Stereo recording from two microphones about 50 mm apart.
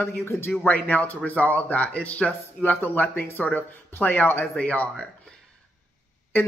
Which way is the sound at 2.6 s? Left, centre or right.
Left.